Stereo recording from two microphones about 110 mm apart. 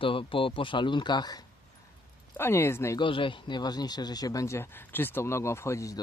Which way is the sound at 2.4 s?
25° left (ahead or behind).